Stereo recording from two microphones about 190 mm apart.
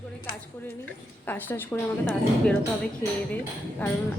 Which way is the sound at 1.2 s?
10° left (ahead or behind).